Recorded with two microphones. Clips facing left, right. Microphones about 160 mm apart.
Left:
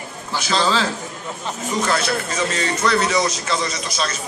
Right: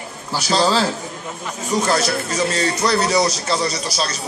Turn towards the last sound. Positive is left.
turn(degrees=-35)  # may be behind; listen again after turning